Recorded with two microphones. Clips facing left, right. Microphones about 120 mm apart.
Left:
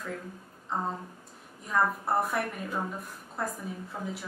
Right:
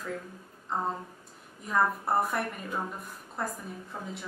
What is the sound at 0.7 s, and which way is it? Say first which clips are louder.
A woman's voice: right 1 dB; centre (ahead or behind).